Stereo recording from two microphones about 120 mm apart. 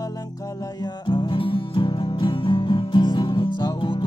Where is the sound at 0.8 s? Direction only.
40° left (ahead or behind).